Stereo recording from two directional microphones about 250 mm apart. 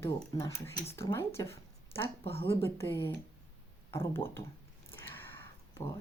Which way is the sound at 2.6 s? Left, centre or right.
Centre.